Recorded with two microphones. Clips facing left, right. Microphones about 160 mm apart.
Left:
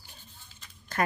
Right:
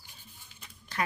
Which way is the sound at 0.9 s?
45° left (ahead or behind).